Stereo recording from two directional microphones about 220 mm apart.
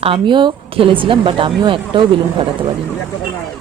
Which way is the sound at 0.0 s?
25° right (ahead or behind).